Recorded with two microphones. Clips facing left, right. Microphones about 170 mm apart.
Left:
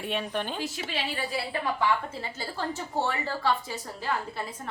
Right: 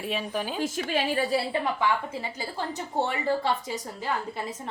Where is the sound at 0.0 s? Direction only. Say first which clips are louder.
Right 1 dB; centre (ahead or behind).